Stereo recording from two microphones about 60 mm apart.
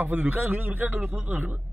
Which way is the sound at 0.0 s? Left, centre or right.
Right.